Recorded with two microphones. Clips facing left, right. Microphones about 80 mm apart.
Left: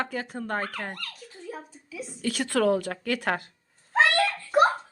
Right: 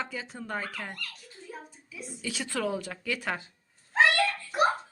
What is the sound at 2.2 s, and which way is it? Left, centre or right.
A woman's voice, left.